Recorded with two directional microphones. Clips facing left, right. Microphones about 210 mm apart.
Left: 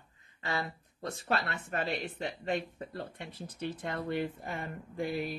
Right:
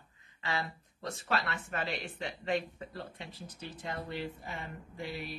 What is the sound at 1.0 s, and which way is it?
Speech, 35° left (ahead or behind).